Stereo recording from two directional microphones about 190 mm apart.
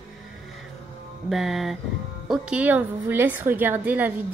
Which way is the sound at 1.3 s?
Centre (ahead or behind).